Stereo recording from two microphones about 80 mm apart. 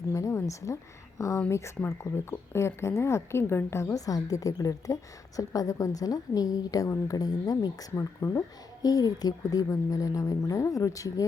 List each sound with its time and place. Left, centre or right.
0.1 s a sound: left
1.4 s speech: left
3.9 s a woman's voice: left